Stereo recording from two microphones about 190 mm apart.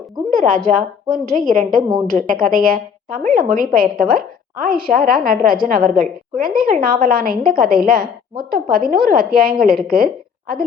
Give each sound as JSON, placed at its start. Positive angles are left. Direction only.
{"t": 0.3, "sound": "a woman's voice", "side_deg": -45}